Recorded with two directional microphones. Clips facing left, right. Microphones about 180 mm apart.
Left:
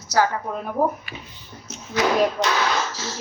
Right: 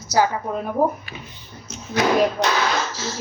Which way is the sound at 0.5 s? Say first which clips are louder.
Right 3 dB; centre (ahead or behind).